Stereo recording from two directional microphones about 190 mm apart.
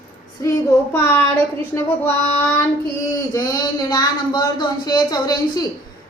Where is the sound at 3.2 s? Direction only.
20° left (ahead or behind).